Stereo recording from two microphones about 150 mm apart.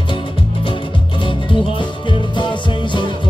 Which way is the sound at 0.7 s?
35° left (ahead or behind).